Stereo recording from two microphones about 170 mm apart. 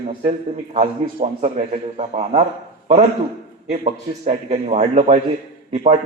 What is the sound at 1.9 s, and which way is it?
Speech, 45° right (ahead or behind).